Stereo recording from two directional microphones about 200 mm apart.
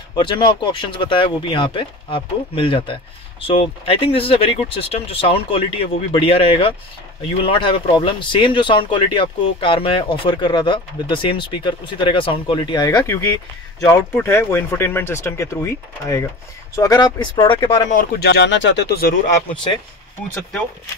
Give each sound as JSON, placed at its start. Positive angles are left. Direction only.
{"t": 0.1, "sound": "speech", "side_deg": 25}
{"t": 18.2, "sound": "speech", "side_deg": 55}